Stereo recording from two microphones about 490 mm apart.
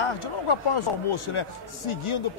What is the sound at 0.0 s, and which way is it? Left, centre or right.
A man's voice, left.